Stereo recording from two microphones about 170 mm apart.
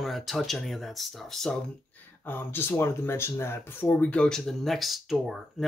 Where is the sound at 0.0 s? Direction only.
Centre (ahead or behind).